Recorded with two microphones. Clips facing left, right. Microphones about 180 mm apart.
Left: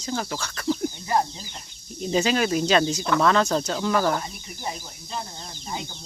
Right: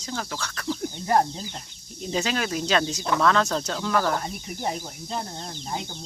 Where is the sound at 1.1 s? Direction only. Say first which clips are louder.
Right 4 dB; 55° right (ahead or behind).